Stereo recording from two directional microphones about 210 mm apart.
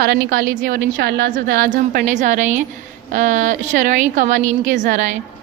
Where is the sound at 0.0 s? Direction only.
50° right (ahead or behind).